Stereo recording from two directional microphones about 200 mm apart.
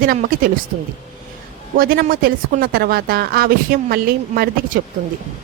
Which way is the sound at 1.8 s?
45° right (ahead or behind).